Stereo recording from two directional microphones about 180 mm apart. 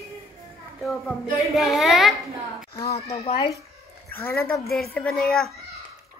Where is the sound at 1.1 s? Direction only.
Centre (ahead or behind).